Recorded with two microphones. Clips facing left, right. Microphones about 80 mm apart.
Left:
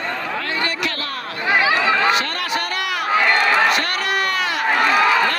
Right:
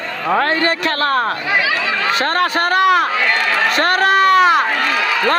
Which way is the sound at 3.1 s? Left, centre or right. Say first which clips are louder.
Left 1 dB; left.